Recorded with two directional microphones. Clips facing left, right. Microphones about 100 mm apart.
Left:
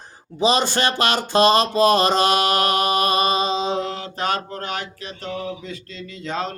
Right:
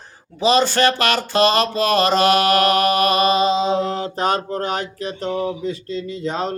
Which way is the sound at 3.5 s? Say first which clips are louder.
Right 4 dB; 25° right (ahead or behind).